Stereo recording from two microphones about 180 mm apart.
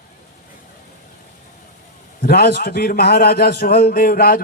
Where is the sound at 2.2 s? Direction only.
60° left (ahead or behind).